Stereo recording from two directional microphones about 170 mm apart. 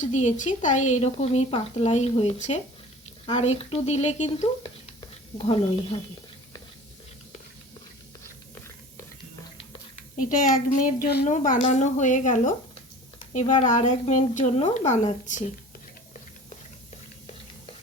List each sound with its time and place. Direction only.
0.0 s speech: 45° left (ahead or behind)
4.9 s a sound: 30° left (ahead or behind)
10.2 s a woman's voice: 50° left (ahead or behind)